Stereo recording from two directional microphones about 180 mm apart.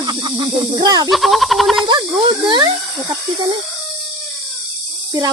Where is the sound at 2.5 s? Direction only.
25° right (ahead or behind).